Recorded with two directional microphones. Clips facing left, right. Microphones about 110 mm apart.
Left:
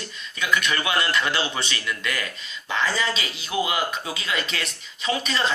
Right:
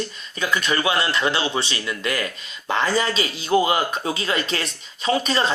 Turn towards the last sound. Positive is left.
turn(degrees=-35)  # may be behind; listen again after turning